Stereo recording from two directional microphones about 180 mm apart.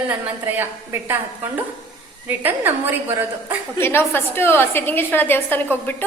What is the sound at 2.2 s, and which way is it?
Speech, 10° right (ahead or behind).